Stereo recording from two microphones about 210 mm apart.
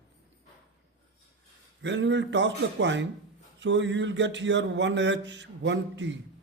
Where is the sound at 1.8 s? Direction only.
60° right (ahead or behind).